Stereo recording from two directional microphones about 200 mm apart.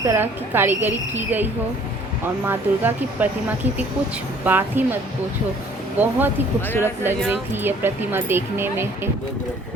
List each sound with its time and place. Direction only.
0.0 s speech: 10° right (ahead or behind)
2.5 s speech: 10° right (ahead or behind)
6.0 s speech: 10° right (ahead or behind)
6.7 s speech: 10° left (ahead or behind)
7.3 s speech: 10° right (ahead or behind)